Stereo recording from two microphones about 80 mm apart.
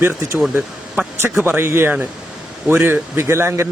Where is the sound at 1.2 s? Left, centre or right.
Right.